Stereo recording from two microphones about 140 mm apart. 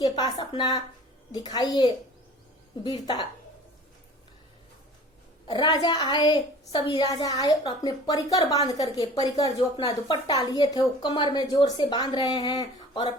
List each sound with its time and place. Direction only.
0.0 s a woman's voice: 30° left (ahead or behind)
5.5 s a woman's voice: 35° left (ahead or behind)